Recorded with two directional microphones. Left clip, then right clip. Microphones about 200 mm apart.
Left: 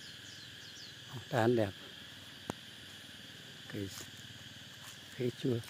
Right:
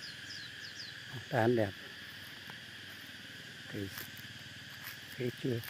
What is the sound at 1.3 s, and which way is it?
Speech, 10° left (ahead or behind).